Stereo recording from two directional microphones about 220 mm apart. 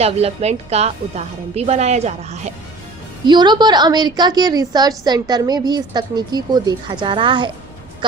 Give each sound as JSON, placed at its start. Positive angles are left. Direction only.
{"t": 0.0, "sound": "a woman's voice", "side_deg": -30}
{"t": 3.2, "sound": "a woman's voice", "side_deg": -20}